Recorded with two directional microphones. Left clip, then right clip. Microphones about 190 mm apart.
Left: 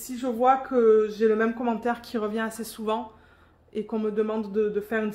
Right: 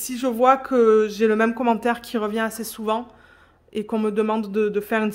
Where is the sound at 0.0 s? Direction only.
55° right (ahead or behind).